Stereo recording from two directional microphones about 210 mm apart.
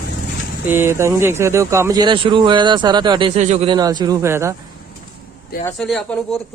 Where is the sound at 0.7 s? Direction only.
10° right (ahead or behind).